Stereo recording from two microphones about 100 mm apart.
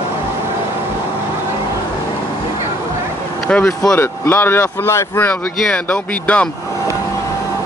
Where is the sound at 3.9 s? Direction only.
25° left (ahead or behind).